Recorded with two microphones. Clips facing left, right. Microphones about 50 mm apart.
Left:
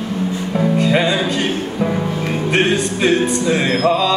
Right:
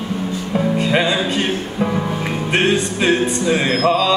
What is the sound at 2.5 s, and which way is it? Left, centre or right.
Music, right.